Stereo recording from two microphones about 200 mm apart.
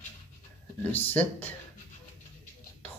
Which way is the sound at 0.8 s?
10° left (ahead or behind).